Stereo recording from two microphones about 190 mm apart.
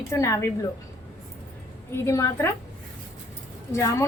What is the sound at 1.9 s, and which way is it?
Speech, 15° left (ahead or behind).